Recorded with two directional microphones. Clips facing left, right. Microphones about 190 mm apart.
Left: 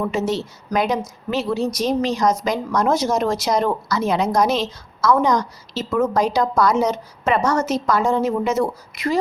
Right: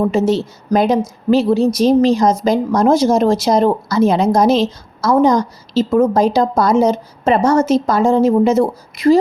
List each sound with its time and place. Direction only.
0.0 s a woman's voice: 30° right (ahead or behind)